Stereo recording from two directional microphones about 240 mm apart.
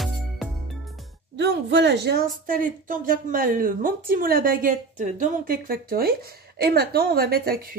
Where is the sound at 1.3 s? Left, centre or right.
Right.